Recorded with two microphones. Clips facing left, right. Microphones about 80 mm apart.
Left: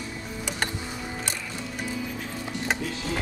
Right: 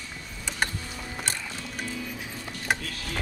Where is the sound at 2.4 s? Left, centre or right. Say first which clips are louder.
Left 1 dB; left.